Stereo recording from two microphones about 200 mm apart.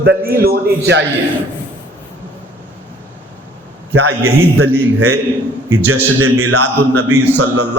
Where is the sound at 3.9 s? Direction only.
75° right (ahead or behind).